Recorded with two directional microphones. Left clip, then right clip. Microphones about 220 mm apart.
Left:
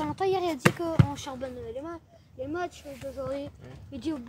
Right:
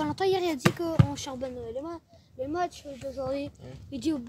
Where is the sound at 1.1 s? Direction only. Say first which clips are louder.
Right 1 dB; 20° right (ahead or behind).